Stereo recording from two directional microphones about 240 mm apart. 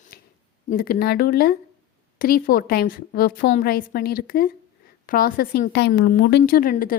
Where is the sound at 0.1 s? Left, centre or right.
Left.